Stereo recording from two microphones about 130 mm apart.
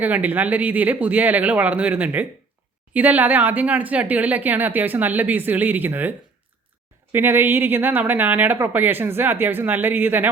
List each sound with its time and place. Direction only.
0.0 s speech: 15° right (ahead or behind)